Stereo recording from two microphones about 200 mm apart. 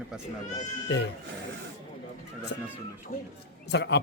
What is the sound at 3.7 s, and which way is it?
Speech, 60° left (ahead or behind).